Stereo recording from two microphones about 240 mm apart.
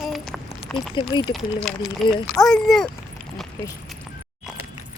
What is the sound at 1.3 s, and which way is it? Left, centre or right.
Speech, centre.